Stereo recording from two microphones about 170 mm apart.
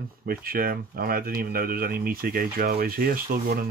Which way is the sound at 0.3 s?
60° right (ahead or behind).